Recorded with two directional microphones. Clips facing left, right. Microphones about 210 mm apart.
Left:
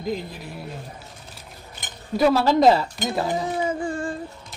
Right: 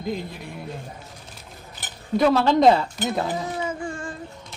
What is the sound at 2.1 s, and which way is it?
Speech, 5° left (ahead or behind).